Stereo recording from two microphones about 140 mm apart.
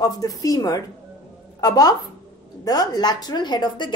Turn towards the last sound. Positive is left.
turn(degrees=30)  # may be behind; listen again after turning